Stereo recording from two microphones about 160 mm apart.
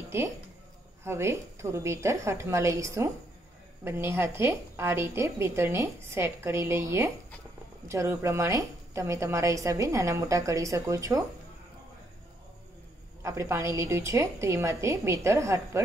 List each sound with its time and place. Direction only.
1.0 s a woman's voice: 15° right (ahead or behind)
13.2 s a woman's voice: 20° right (ahead or behind)